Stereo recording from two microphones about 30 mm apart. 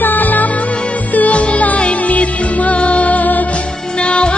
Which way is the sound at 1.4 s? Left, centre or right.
Left.